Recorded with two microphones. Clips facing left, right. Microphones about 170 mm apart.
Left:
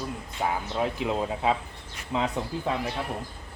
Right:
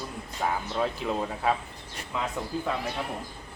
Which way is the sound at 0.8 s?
15° left (ahead or behind).